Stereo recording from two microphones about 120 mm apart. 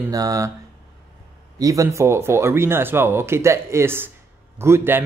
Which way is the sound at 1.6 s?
25° right (ahead or behind).